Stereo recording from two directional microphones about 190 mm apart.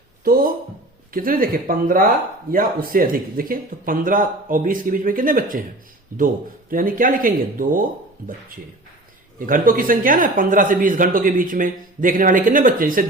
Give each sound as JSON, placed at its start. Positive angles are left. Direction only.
{"t": 0.3, "sound": "speech", "side_deg": -45}
{"t": 9.5, "sound": "speech", "side_deg": -45}